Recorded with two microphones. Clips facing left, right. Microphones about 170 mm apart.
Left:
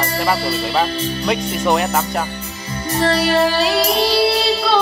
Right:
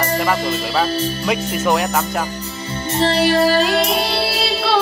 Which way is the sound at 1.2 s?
5° right (ahead or behind).